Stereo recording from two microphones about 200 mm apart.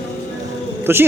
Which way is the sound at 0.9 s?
10° right (ahead or behind).